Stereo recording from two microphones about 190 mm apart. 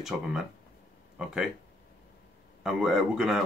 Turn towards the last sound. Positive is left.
turn(degrees=0)  # may be behind; listen again after turning